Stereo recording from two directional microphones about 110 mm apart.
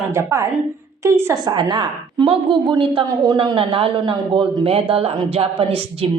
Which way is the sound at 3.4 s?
50° right (ahead or behind).